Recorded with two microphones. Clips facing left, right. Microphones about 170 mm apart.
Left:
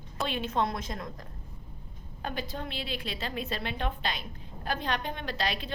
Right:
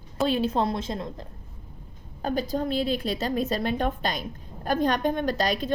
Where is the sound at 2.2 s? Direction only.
40° right (ahead or behind).